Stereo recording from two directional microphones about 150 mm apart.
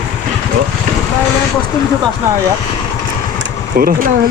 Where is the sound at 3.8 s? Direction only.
75° right (ahead or behind).